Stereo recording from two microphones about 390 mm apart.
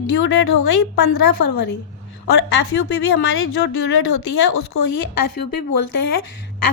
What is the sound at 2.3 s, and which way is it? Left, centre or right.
A woman's voice, left.